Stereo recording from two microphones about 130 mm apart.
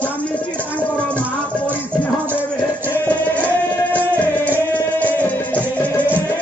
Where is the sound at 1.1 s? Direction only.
15° right (ahead or behind).